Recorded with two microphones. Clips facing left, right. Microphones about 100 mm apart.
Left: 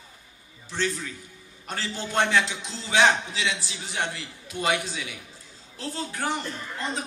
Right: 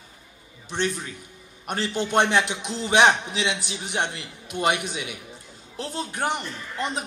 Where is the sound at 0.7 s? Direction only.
20° right (ahead or behind).